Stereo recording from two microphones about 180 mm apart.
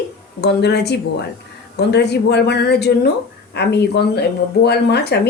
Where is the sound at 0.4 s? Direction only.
65° left (ahead or behind).